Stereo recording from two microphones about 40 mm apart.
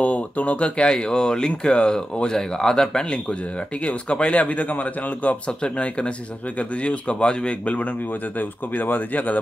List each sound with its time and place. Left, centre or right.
0.0 s speech: left; by 3.3 s centre
3.8 s a man's voice: left
5.5 s a man's voice: left
8.1 s speech: left